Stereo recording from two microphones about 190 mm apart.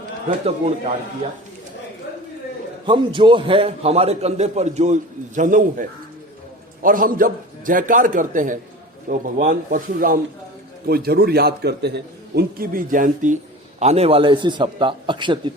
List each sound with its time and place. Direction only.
0.3 s a man's voice: 35° right (ahead or behind)
2.8 s a man's voice: 25° right (ahead or behind); by 5.8 s 45° right (ahead or behind)
6.8 s a man's voice: 45° right (ahead or behind); by 15.5 s 25° right (ahead or behind)